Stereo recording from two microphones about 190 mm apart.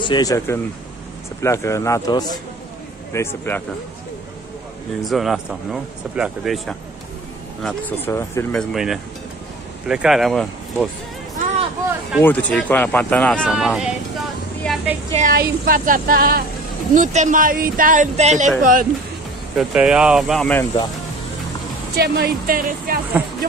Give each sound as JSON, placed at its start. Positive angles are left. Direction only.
{"t": 0.0, "sound": "speech", "side_deg": 20}
{"t": 5.0, "sound": "speech", "side_deg": 0}
{"t": 12.2, "sound": "speech", "side_deg": 10}
{"t": 14.7, "sound": "a sound", "side_deg": 5}
{"t": 15.1, "sound": "speech", "side_deg": -45}
{"t": 16.9, "sound": "speech", "side_deg": -40}
{"t": 19.5, "sound": "speech", "side_deg": -5}
{"t": 21.9, "sound": "speech", "side_deg": -55}